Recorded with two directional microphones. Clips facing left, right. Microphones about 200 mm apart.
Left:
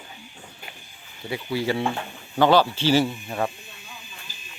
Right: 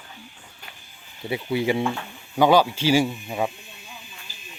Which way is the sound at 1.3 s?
20° right (ahead or behind).